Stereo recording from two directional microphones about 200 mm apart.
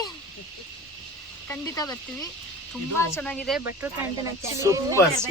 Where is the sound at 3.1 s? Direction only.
5° left (ahead or behind).